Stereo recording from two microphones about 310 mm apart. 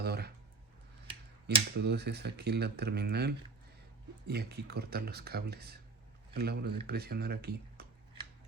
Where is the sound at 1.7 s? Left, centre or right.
Right.